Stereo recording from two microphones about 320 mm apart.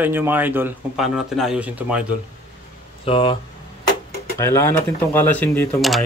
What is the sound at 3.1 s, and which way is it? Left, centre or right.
Speech, centre.